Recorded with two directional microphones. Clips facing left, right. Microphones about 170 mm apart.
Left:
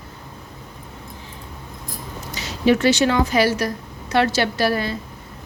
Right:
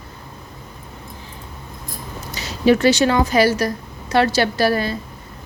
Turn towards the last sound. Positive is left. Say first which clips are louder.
# right 2 dB
turn(degrees=-40)  # may be behind; listen again after turning